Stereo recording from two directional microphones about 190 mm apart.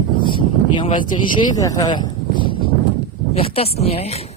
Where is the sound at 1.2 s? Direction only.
20° left (ahead or behind).